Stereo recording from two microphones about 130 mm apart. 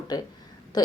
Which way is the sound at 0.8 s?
30° left (ahead or behind).